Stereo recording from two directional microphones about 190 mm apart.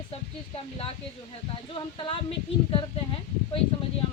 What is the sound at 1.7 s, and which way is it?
A woman's voice, 30° left (ahead or behind).